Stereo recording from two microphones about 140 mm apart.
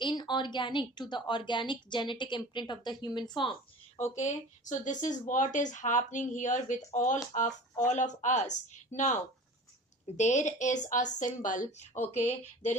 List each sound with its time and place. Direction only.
0.0 s a woman's voice: 35° left (ahead or behind)
4.1 s speech: 60° left (ahead or behind)
10.2 s speech: 60° left (ahead or behind)